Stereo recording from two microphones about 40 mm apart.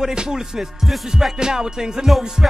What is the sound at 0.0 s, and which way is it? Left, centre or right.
Music, centre.